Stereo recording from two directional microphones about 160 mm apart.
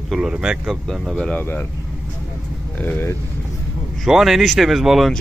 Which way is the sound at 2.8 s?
15° left (ahead or behind).